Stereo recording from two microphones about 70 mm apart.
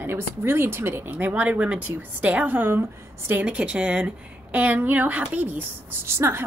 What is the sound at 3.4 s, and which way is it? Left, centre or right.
A woman's voice, centre.